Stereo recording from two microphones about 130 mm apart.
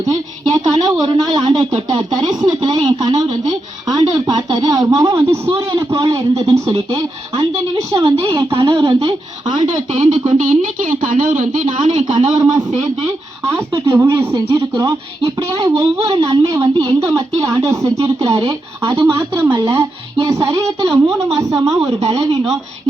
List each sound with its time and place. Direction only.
0.1 s a woman's voice: 30° right (ahead or behind)
5.5 s speech: 40° right (ahead or behind)
5.9 s a woman's voice: 25° right (ahead or behind)
8.0 s speech: 40° right (ahead or behind)
9.9 s speech: 65° right (ahead or behind)
13.9 s speech: 15° right (ahead or behind)
14.5 s a woman's voice: 25° right (ahead or behind)
16.1 s a woman's voice: 40° right (ahead or behind)